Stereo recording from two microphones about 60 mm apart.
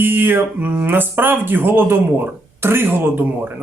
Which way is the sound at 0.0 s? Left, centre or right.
Right.